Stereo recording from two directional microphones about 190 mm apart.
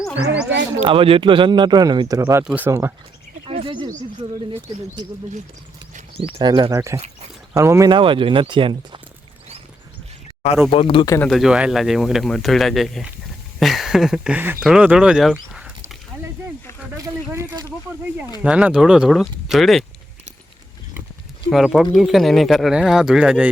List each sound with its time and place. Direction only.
0.8 s speech: 30° right (ahead or behind)
2.4 s speech: 5° right (ahead or behind)
2.6 s speech: 15° right (ahead or behind)
3.4 s bird: 30° right (ahead or behind)
4.2 s speech: 25° right (ahead or behind)
6.4 s speech: 20° right (ahead or behind)
10.7 s speech: 30° left (ahead or behind)
11.3 s speech: centre (ahead or behind)
16.1 s a sound: 15° right (ahead or behind)
18.4 s speech: 5° right (ahead or behind)
21.5 s speech: centre (ahead or behind)